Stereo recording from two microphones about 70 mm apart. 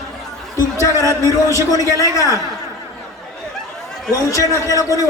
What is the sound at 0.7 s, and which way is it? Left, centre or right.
Speech, left.